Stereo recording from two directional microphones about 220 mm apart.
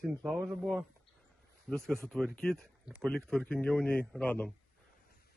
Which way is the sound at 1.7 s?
5° left (ahead or behind).